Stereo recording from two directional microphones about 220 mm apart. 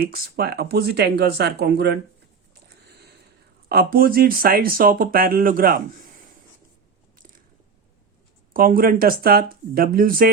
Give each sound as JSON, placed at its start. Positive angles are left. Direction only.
{"t": 0.0, "sound": "speech", "side_deg": -45}
{"t": 2.6, "sound": "sniff", "side_deg": -50}
{"t": 3.7, "sound": "speech", "side_deg": -45}
{"t": 8.5, "sound": "speech", "side_deg": -40}